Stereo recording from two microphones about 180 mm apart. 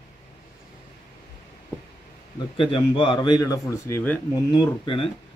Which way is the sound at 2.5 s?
30° left (ahead or behind).